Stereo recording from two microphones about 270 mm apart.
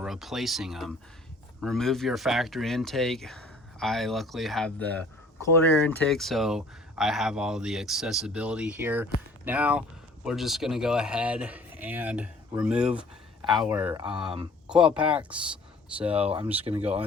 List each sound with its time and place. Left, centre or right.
0.0 s speech: centre
13.4 s speech: centre
16.0 s speech: right